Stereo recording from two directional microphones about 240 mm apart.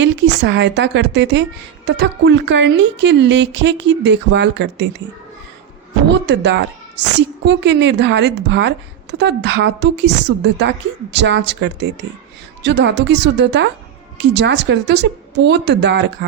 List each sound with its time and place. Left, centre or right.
0.0 s a woman's voice: right
6.1 s a woman's voice: right